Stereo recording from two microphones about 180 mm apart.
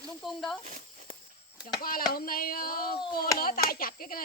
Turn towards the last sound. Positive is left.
turn(degrees=55)  # may be behind; listen again after turning